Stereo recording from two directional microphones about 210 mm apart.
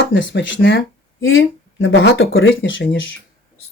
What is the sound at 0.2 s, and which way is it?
Speech, 65° left (ahead or behind).